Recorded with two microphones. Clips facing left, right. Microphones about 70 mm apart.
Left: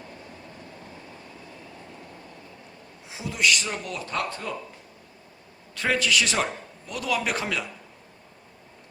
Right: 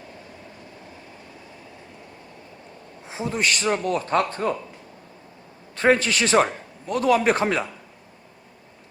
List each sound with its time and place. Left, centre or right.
3.1 s a man's voice: right
5.7 s a man's voice: right